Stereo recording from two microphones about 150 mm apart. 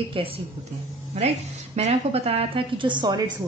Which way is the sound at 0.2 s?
35° right (ahead or behind).